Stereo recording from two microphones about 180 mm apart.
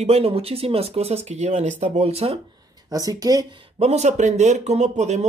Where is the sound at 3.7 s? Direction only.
35° right (ahead or behind).